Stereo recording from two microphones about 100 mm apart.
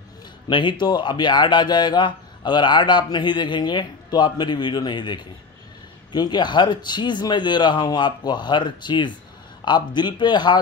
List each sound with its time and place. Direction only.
0.5 s speech: 50° left (ahead or behind)